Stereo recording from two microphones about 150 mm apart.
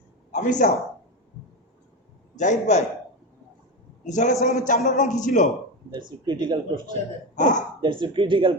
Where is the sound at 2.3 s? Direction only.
55° left (ahead or behind).